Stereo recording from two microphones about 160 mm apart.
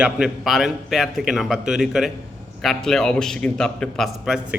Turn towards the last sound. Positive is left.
turn(degrees=0)  # may be behind; listen again after turning